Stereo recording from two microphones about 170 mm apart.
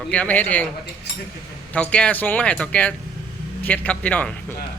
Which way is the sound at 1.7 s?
5° left (ahead or behind).